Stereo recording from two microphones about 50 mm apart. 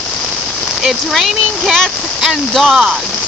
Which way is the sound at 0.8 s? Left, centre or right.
Centre.